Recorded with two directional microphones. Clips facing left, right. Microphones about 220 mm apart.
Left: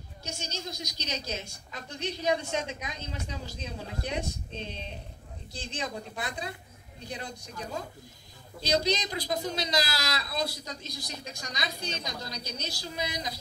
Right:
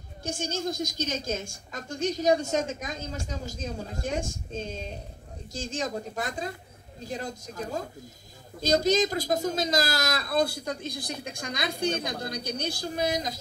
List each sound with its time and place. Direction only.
0.2 s speech: 50° right (ahead or behind)